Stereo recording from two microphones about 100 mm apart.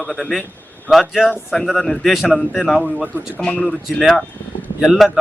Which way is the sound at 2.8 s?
15° right (ahead or behind).